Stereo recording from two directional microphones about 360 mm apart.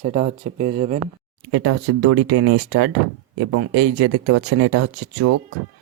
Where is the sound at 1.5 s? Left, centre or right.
Right.